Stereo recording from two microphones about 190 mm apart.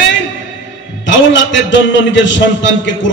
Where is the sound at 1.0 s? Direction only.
75° left (ahead or behind).